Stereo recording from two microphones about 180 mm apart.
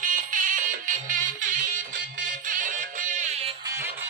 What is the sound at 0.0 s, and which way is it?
Music, 45° right (ahead or behind).